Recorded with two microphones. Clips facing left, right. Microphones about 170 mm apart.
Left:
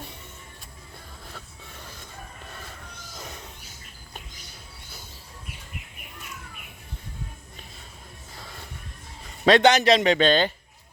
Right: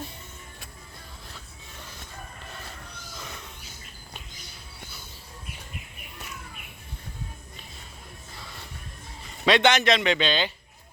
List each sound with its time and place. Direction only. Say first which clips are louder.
9.5 s a man's voice: left 4 dB; 40° left (ahead or behind)